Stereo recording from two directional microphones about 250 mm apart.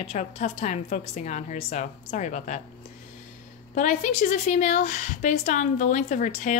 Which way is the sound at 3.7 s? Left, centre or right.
Left.